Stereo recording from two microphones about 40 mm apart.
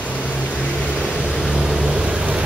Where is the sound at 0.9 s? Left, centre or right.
Left.